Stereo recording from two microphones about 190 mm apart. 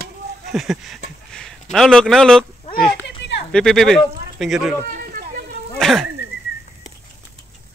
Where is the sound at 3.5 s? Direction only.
Centre (ahead or behind).